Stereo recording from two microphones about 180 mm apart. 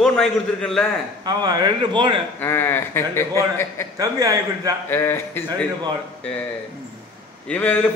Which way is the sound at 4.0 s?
20° right (ahead or behind).